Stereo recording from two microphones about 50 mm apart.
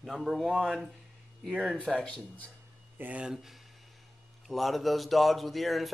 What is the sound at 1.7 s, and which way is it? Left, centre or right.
Speech, centre.